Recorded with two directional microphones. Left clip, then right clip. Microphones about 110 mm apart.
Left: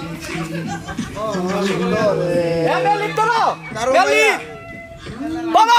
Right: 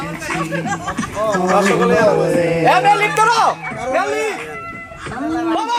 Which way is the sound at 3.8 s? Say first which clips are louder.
Left 4 dB; 10° left (ahead or behind).